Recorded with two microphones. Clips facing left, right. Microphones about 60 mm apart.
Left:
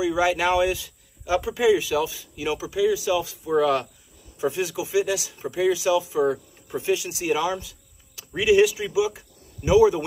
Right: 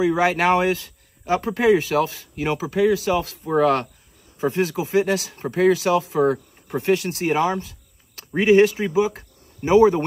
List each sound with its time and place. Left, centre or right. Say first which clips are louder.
0.0 s speech: right 3 dB; right